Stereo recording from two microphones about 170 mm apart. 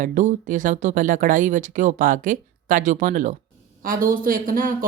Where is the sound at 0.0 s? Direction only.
50° right (ahead or behind).